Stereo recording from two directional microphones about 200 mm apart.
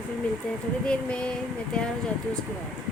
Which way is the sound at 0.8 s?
5° left (ahead or behind).